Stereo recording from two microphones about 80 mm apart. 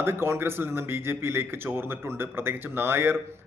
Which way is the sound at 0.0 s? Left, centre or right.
Right.